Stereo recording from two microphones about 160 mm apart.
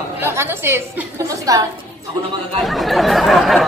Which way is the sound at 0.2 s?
15° right (ahead or behind).